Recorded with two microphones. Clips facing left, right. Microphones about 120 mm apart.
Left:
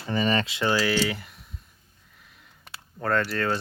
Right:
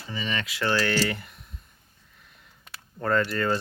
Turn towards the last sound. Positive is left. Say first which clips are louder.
# right 1 dB
turn(degrees=0)  # may be behind; listen again after turning